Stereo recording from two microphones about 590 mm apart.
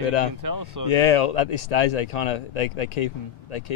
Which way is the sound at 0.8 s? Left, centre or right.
Left.